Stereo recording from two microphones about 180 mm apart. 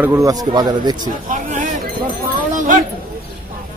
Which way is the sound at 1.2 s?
45° right (ahead or behind).